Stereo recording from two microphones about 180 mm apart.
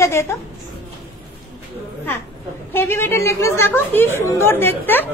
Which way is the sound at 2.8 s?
15° left (ahead or behind).